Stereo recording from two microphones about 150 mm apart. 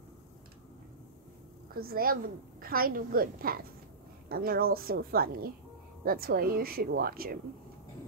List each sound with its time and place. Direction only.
1.7 s a woman's voice: 80° right
4.3 s speech: 90° right